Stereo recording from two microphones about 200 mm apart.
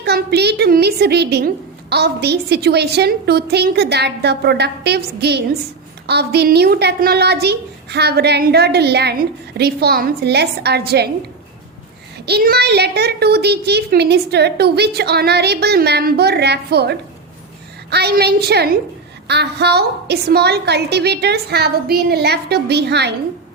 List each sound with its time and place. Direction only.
0.0 s a woman's voice: 55° right (ahead or behind)
12.2 s a woman's voice: 50° right (ahead or behind)